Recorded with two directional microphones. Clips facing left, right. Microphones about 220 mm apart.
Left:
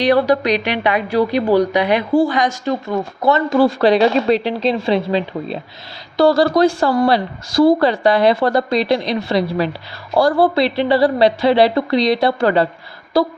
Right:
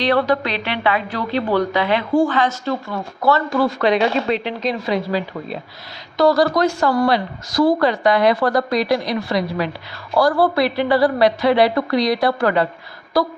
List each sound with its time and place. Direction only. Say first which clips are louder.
0.0 s a woman's voice: left 4 dB; 15° left (ahead or behind)